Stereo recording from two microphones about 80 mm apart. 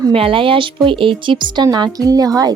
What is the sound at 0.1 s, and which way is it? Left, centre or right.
Speech, right.